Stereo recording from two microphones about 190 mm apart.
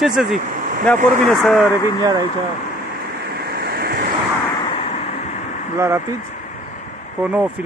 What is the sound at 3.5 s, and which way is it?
Waves, 55° right (ahead or behind).